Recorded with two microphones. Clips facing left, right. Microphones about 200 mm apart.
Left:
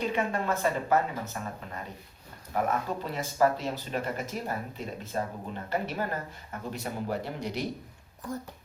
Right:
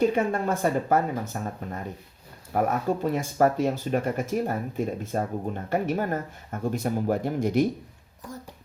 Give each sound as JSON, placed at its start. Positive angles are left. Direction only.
{"t": 0.0, "sound": "speech", "side_deg": -45}